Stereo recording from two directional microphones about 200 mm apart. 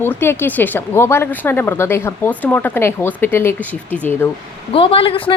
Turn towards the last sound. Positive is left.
turn(degrees=25)  # may be behind; listen again after turning